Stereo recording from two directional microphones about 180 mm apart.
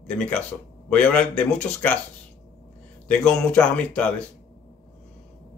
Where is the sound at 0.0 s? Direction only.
5° left (ahead or behind).